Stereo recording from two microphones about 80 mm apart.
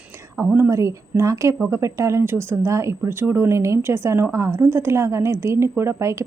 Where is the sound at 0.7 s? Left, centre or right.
Right.